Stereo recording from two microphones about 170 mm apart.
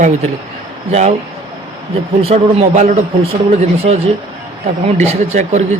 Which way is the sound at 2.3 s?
40° right (ahead or behind).